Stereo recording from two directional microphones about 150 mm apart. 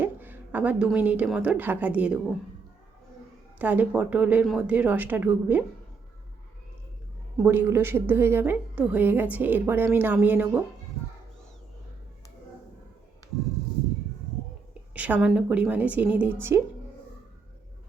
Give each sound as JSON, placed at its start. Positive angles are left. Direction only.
{"t": 0.0, "sound": "a sound", "side_deg": -10}
{"t": 0.9, "sound": "a woman's voice", "side_deg": -10}
{"t": 3.6, "sound": "a woman's voice", "side_deg": -10}
{"t": 7.4, "sound": "a woman's voice", "side_deg": -15}
{"t": 14.7, "sound": "a woman's voice", "side_deg": -10}